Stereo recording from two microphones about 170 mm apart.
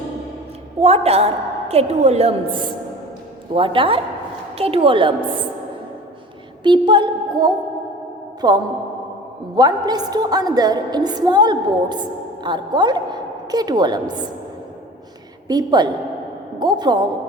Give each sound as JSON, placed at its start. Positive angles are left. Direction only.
{"t": 0.8, "sound": "a woman's voice", "side_deg": -35}
{"t": 6.6, "sound": "a woman's voice", "side_deg": -25}
{"t": 15.4, "sound": "a woman's voice", "side_deg": -25}